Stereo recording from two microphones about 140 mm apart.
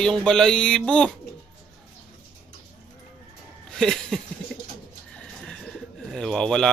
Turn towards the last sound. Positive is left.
turn(degrees=5)  # may be behind; listen again after turning